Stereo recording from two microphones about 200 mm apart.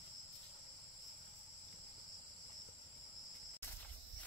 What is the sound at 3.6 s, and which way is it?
Cricket, 10° left (ahead or behind).